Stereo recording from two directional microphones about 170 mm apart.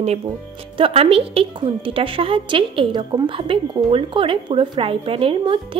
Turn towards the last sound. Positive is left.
turn(degrees=-30)  # may be behind; listen again after turning